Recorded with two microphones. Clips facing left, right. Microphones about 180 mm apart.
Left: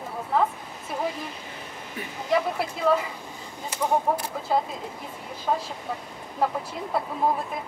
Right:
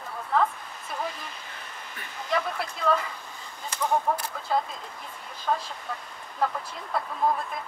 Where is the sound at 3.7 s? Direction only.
5° left (ahead or behind).